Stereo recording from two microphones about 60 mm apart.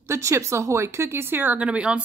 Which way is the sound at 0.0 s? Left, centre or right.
Right.